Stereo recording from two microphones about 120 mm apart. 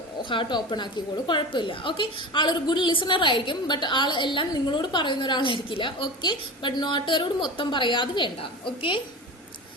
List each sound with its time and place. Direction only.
0.2 s a woman's voice: 45° left (ahead or behind)